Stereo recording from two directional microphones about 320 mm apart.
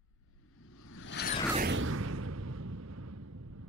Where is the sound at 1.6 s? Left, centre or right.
Right.